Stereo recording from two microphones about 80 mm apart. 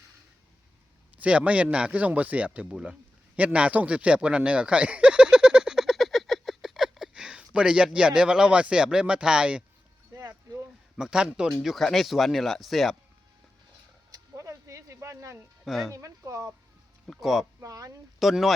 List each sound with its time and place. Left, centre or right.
1.1 s speech: centre
10.1 s a sound: right
10.9 s speech: centre
11.6 s speech: centre
14.1 s a sound: right
15.6 s speech: centre
15.9 s speech: right
17.1 s speech: centre
17.6 s speech: right
18.2 s speech: centre